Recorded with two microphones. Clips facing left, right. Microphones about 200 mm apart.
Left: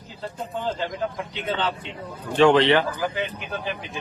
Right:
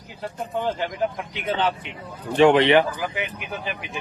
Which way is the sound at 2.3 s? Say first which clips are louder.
Right 1 dB; 20° right (ahead or behind).